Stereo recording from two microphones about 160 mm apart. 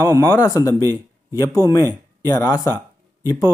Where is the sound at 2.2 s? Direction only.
20° left (ahead or behind).